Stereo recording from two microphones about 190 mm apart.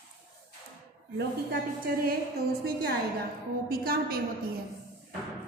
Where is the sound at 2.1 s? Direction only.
55° right (ahead or behind).